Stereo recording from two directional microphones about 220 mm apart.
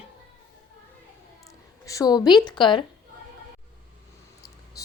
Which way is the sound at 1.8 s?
15° left (ahead or behind).